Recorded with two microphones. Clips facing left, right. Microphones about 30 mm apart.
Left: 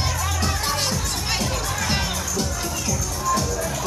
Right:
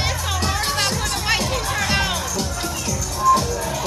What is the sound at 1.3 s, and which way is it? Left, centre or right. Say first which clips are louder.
Music: right 4 dB; right.